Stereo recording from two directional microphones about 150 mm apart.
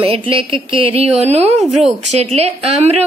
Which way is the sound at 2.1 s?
45° right (ahead or behind).